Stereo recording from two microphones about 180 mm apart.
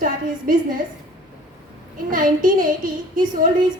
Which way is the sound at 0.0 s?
50° right (ahead or behind).